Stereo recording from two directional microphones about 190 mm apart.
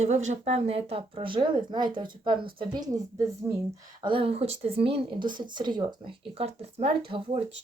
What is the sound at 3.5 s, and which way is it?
Speech, 10° right (ahead or behind).